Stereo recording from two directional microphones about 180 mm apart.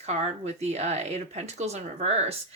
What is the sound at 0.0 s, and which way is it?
Speech, 40° right (ahead or behind).